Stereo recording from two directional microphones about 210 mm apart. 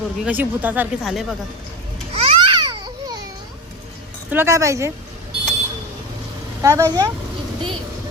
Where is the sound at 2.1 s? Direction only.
25° right (ahead or behind).